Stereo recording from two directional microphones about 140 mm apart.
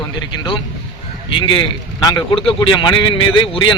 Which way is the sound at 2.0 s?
35° left (ahead or behind).